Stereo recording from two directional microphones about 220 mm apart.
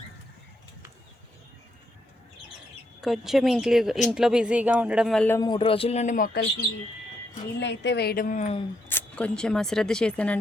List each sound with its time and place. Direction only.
3.0 s speech: centre (ahead or behind)
5.4 s a man's voice: 20° left (ahead or behind); by 6.4 s 40° left (ahead or behind)
7.6 s a woman's voice: 50° left (ahead or behind); by 8.6 s 30° left (ahead or behind)
8.9 s speech: 10° left (ahead or behind)